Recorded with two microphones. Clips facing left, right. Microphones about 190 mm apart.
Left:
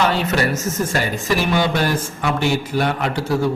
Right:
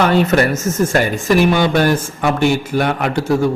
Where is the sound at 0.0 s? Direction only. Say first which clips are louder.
Right 6 dB; 50° right (ahead or behind).